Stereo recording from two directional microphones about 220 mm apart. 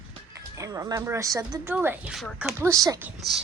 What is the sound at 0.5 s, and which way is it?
Speech, 15° right (ahead or behind).